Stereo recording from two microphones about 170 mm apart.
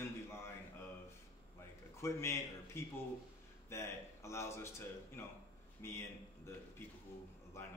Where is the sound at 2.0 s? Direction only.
15° left (ahead or behind).